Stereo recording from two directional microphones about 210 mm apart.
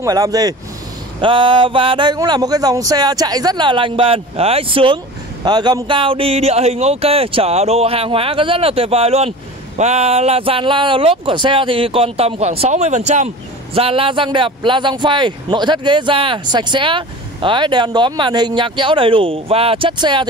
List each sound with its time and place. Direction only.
0.0 s speech: 15° right (ahead or behind)